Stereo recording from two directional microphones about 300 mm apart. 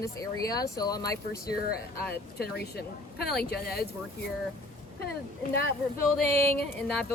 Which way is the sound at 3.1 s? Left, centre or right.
Left.